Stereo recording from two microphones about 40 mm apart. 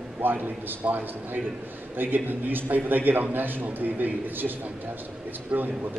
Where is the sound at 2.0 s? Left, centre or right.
Right.